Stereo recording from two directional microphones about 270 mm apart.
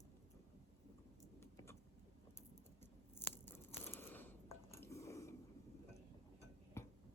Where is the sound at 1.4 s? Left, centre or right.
Centre.